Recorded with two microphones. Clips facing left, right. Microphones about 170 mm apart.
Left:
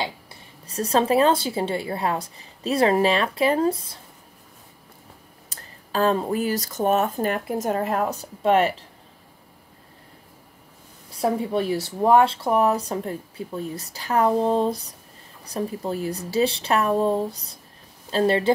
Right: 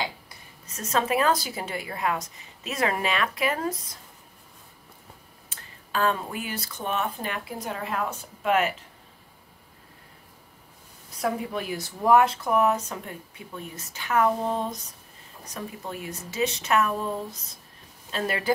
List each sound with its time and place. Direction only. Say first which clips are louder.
0.0 s a woman's voice: left 3 dB; 30° left (ahead or behind)
5.5 s speech: left 3 dB; 35° left (ahead or behind)
11.1 s a woman's voice: left 5 dB; 30° left (ahead or behind)